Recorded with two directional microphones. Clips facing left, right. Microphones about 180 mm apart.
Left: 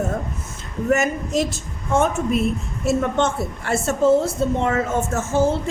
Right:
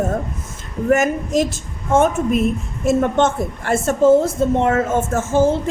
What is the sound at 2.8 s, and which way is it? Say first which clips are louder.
A woman's voice: right 4 dB; 50° right (ahead or behind).